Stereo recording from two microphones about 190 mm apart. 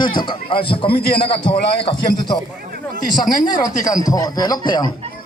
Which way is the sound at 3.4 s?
20° left (ahead or behind).